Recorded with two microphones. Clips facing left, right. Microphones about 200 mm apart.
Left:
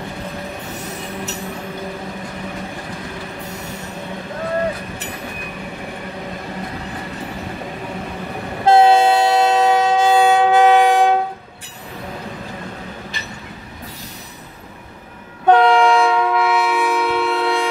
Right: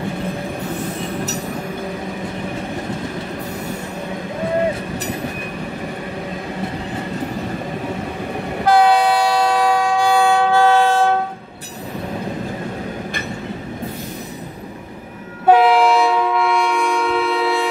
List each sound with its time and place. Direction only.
8.6 s train: 25° left (ahead or behind)
15.4 s train: 5° right (ahead or behind)